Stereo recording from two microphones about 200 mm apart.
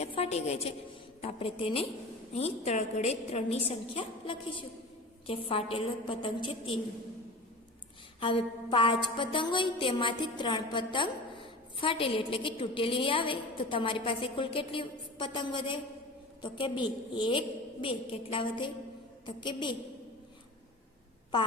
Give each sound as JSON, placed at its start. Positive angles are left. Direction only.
{"t": 0.0, "sound": "a woman's voice", "side_deg": 30}
{"t": 8.2, "sound": "a woman's voice", "side_deg": 25}